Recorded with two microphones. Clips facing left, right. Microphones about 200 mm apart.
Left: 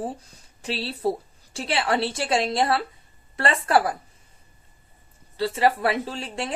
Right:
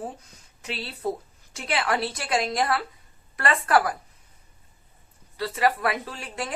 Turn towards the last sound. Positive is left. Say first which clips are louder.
# left 3 dB
turn(degrees=30)  # may be behind; listen again after turning